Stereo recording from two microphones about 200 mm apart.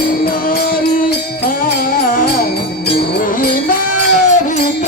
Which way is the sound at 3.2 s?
45° left (ahead or behind).